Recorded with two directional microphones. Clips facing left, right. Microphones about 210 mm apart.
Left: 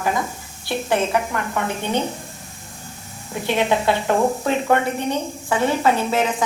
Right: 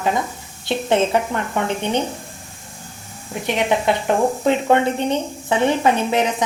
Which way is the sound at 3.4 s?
20° right (ahead or behind).